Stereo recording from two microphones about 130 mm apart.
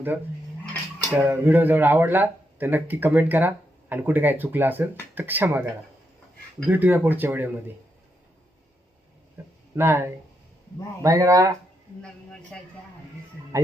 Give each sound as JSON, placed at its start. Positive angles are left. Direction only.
{"t": 0.1, "sound": "speech", "side_deg": -15}
{"t": 6.7, "sound": "speech", "side_deg": -15}
{"t": 9.7, "sound": "speech", "side_deg": -20}
{"t": 12.5, "sound": "speech", "side_deg": 5}